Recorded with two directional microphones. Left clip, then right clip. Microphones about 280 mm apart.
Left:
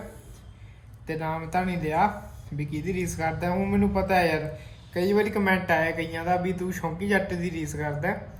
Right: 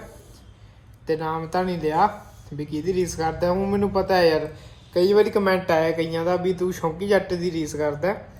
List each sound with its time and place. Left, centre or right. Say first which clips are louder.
1.0 s speech: right 6 dB; centre